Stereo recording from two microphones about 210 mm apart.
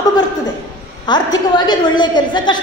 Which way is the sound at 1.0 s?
20° left (ahead or behind).